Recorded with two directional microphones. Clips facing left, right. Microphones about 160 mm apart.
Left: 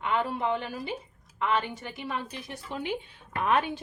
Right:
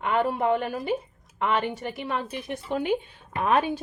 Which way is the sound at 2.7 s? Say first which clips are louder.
Right 7 dB; 50° right (ahead or behind).